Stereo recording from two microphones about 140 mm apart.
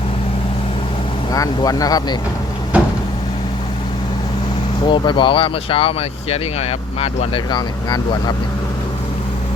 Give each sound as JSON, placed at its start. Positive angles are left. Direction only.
{"t": 1.3, "sound": "speech", "side_deg": 25}
{"t": 2.7, "sound": "a sound", "side_deg": -10}
{"t": 4.9, "sound": "speech", "side_deg": 35}